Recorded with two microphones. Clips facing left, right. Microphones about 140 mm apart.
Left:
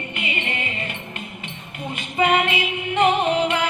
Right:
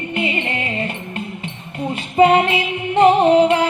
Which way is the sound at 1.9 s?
35° right (ahead or behind).